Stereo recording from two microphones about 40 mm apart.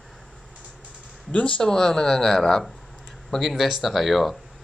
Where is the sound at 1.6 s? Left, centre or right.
Centre.